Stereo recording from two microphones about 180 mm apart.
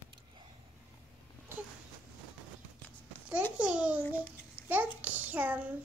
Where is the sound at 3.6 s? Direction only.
5° right (ahead or behind).